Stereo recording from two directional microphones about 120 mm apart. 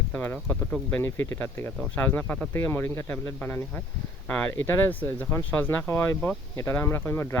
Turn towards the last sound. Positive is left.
turn(degrees=20)  # may be behind; listen again after turning